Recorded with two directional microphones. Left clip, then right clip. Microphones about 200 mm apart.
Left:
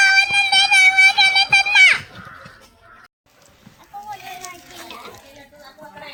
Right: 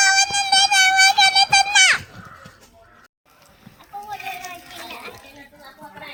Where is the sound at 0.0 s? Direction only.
20° right (ahead or behind).